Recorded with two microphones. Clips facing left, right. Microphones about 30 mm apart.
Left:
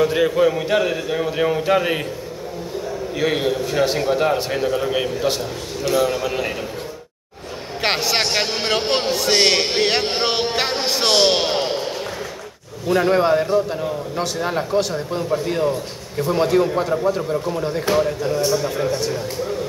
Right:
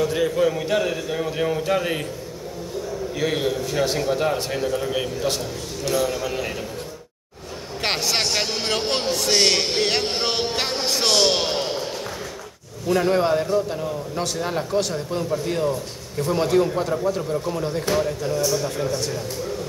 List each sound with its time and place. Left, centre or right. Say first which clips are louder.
0.0 s a man's voice: left 4 dB; left
3.2 s a man's voice: left 3 dB; centre
7.8 s a man's voice: left 3 dB; centre